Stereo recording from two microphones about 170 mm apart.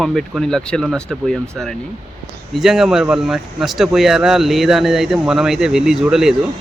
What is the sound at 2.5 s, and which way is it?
Speech, centre (ahead or behind).